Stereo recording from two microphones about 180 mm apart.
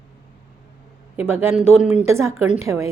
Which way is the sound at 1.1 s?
15° right (ahead or behind).